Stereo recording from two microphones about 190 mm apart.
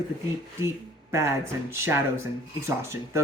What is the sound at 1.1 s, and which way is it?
Speech, 15° right (ahead or behind).